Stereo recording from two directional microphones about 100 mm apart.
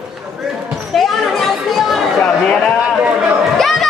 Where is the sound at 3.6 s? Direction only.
Centre (ahead or behind).